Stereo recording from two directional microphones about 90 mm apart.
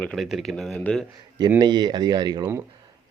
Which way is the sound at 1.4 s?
45° right (ahead or behind).